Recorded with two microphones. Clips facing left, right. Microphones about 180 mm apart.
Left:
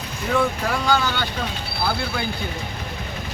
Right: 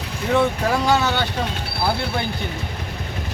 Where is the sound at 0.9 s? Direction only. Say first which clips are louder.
Right 1 dB; 25° right (ahead or behind).